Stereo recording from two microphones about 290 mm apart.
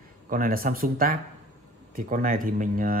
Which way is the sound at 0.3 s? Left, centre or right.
Right.